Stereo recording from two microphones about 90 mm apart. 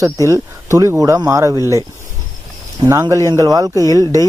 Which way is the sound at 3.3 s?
45° right (ahead or behind).